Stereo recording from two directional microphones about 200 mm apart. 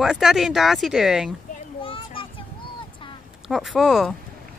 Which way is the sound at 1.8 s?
25° left (ahead or behind).